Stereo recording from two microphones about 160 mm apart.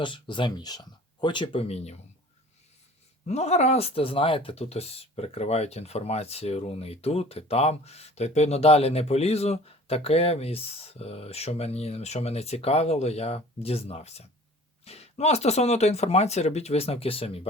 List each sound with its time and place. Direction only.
0.0 s speech: 30° left (ahead or behind)
3.2 s speech: 45° left (ahead or behind)